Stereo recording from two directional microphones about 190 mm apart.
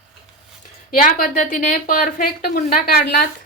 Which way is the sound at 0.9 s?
45° left (ahead or behind).